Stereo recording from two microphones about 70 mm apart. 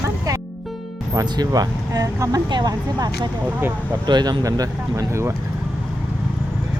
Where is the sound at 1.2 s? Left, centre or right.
Right.